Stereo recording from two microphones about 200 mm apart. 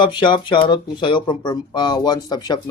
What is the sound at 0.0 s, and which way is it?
Speech, 25° left (ahead or behind).